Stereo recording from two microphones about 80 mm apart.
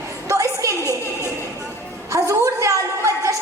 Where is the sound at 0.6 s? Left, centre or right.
Right.